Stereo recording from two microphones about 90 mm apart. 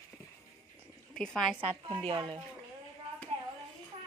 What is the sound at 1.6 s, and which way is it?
Speech, 85° right.